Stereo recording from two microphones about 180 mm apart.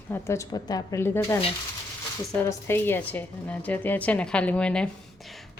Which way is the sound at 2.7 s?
10° left (ahead or behind).